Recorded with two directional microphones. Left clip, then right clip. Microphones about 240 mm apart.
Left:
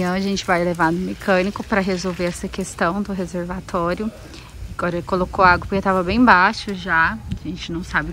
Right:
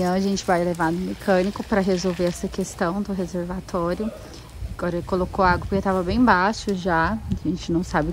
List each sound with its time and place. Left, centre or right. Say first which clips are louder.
0.0 s speech: left 1 dB; centre